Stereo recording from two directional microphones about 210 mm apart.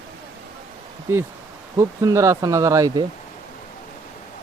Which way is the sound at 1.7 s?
15° right (ahead or behind).